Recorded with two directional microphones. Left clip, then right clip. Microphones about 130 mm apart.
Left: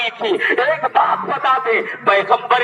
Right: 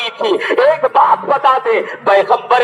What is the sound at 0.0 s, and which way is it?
Speech, 35° right (ahead or behind).